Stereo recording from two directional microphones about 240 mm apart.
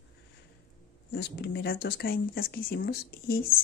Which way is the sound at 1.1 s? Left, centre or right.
Left.